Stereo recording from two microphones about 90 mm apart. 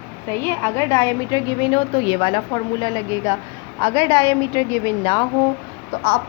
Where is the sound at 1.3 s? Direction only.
60° left (ahead or behind).